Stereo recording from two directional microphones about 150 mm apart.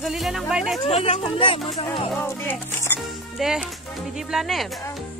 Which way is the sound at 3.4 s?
5° right (ahead or behind).